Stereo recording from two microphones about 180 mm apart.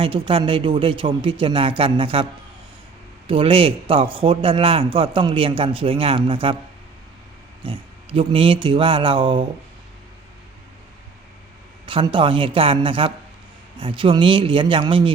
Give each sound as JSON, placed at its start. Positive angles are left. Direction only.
{"t": 0.0, "sound": "a man's voice", "side_deg": -30}
{"t": 3.2, "sound": "a man's voice", "side_deg": -30}
{"t": 7.6, "sound": "a man's voice", "side_deg": -30}
{"t": 11.9, "sound": "a man's voice", "side_deg": -30}